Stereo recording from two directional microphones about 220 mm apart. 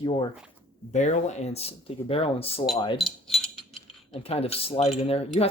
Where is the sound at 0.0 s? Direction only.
20° left (ahead or behind).